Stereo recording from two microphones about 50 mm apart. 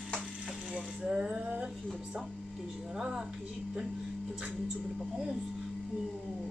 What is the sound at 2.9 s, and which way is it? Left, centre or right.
Speech, centre.